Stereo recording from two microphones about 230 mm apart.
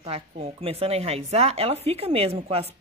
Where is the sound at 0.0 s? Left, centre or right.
Right.